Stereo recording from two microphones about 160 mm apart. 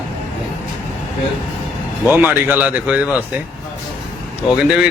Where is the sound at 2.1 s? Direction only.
10° right (ahead or behind).